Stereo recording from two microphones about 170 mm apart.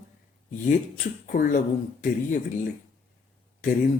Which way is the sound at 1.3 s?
60° left (ahead or behind).